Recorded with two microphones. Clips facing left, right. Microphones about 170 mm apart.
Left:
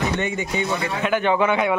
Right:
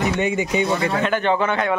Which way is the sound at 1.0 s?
10° left (ahead or behind).